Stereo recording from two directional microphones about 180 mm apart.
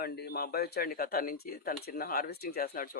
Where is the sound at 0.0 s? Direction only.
60° left (ahead or behind).